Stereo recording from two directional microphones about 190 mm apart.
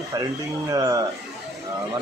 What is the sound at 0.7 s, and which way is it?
Speech, 20° right (ahead or behind).